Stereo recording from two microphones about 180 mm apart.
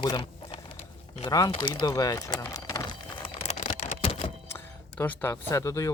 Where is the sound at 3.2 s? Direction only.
35° left (ahead or behind).